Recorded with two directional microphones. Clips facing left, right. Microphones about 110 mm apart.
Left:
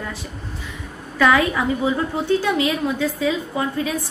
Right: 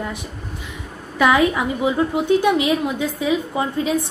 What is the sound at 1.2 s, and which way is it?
A woman's voice, 15° right (ahead or behind).